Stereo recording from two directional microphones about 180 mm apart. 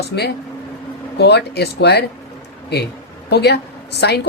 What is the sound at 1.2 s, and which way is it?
Speech, 65° left (ahead or behind).